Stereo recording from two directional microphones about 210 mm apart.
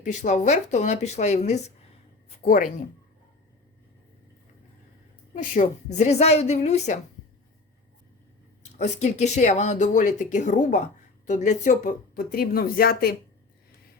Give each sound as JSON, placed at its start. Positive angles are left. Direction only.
{"t": 0.0, "sound": "speech", "side_deg": 35}
{"t": 5.3, "sound": "speech", "side_deg": 35}
{"t": 8.6, "sound": "speech", "side_deg": 35}